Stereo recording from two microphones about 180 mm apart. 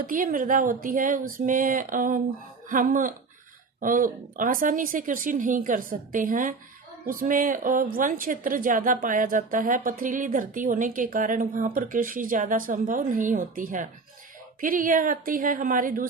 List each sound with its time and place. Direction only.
0.0 s a woman's voice: 50° right (ahead or behind)